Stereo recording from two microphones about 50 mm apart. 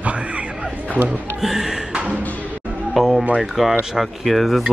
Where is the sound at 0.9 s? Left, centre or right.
Right.